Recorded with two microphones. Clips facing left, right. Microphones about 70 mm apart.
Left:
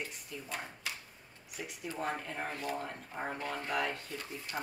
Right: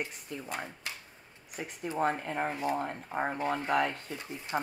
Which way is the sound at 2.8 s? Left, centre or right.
Right.